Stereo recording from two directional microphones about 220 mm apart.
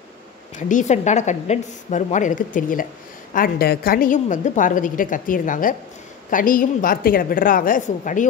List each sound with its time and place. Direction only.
0.6 s a woman's voice: 35° left (ahead or behind)